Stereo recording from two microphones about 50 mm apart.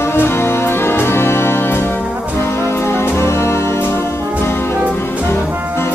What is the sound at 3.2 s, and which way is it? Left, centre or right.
Music, left.